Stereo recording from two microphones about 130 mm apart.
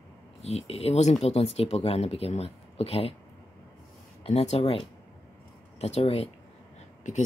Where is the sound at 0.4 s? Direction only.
55° left (ahead or behind).